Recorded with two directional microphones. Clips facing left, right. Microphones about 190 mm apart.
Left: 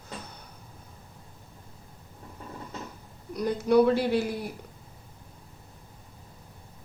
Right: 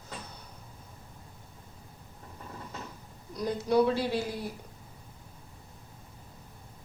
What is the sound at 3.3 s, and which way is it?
Speech, 60° left (ahead or behind).